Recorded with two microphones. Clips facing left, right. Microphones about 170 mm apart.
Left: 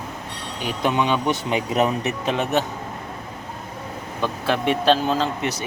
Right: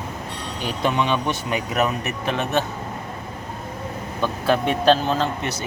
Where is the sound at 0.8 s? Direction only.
15° left (ahead or behind).